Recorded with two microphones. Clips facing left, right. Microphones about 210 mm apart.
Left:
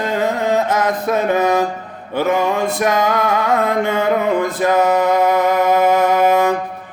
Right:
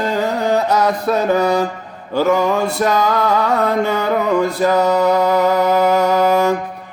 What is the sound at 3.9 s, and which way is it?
Music, 20° left (ahead or behind).